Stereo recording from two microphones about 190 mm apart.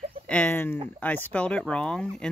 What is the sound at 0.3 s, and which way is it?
Speech, 10° left (ahead or behind).